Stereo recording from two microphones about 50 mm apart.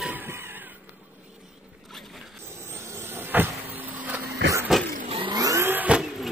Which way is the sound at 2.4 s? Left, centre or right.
Right.